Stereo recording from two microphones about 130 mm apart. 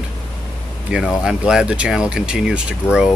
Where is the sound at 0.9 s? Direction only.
5° right (ahead or behind).